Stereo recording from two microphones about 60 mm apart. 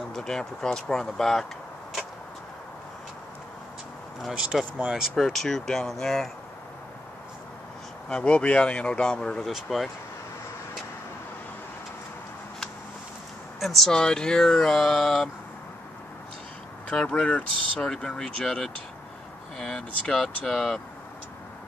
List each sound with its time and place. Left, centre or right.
0.1 s speech: centre
4.4 s speech: centre
5.1 s speech: centre
8.1 s speech: centre
9.4 s speech: centre
13.6 s speech: centre
16.9 s speech: centre